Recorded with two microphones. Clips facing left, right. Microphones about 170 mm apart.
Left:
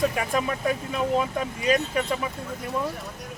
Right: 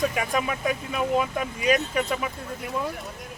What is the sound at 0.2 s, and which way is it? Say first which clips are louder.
Speech: even; 5° right (ahead or behind).